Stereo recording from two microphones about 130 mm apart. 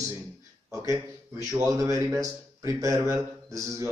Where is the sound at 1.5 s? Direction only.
15° right (ahead or behind).